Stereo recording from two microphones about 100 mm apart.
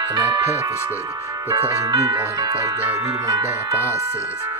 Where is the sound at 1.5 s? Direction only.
35° right (ahead or behind).